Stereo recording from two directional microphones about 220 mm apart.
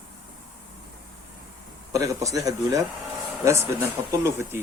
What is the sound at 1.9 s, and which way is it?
A man's voice, 15° right (ahead or behind).